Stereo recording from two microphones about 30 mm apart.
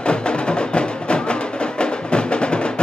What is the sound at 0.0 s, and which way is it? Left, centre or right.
Music, left.